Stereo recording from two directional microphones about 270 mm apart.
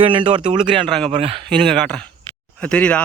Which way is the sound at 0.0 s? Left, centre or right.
Centre.